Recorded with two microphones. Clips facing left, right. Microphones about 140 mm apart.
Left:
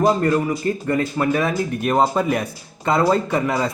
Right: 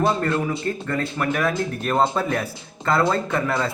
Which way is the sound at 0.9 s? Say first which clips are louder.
Left 5 dB; 20° left (ahead or behind).